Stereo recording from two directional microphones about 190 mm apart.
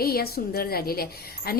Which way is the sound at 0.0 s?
55° left (ahead or behind).